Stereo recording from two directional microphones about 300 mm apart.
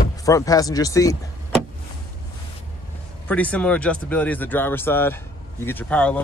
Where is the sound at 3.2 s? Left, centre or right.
Centre.